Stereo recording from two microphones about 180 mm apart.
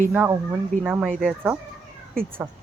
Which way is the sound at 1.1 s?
Centre (ahead or behind).